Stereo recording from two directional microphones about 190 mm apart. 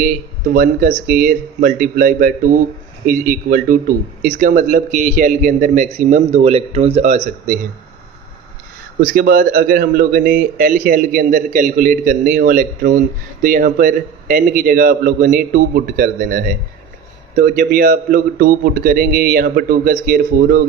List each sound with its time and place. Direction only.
0.0 s speech: 45° right (ahead or behind)
9.0 s speech: 50° right (ahead or behind)